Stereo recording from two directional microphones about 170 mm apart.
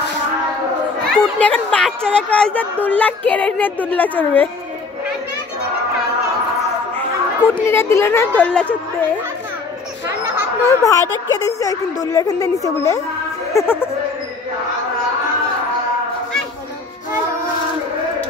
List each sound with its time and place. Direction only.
1.1 s speech: 5° left (ahead or behind)
7.0 s speech: 15° left (ahead or behind)
10.7 s a woman's voice: 20° left (ahead or behind)